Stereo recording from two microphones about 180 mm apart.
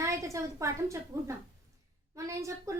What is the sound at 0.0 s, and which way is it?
Speech, 15° right (ahead or behind).